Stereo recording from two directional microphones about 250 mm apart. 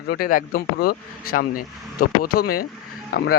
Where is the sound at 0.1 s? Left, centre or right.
Left.